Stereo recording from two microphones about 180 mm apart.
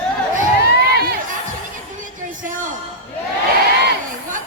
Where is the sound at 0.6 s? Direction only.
65° left (ahead or behind).